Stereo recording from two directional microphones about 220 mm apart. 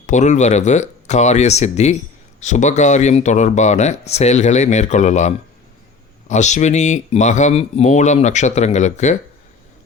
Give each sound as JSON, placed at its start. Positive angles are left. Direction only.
{"t": 0.0, "sound": "speech", "side_deg": 35}